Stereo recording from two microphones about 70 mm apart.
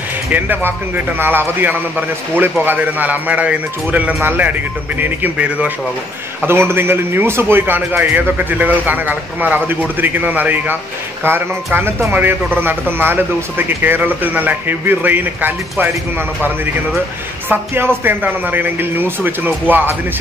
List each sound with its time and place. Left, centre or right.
0.3 s a man's voice: right
6.4 s a man's voice: right
17.5 s a man's voice: right